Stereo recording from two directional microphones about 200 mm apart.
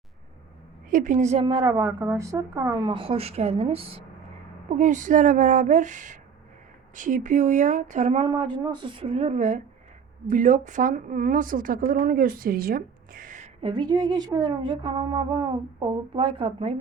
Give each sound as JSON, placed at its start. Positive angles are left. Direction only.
{"t": 0.9, "sound": "a woman's voice", "side_deg": -40}
{"t": 4.7, "sound": "a woman's voice", "side_deg": -40}